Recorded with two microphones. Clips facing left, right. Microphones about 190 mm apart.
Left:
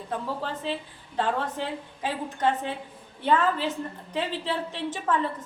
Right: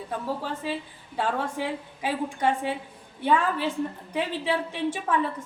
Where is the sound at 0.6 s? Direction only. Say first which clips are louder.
Even; 10° right (ahead or behind).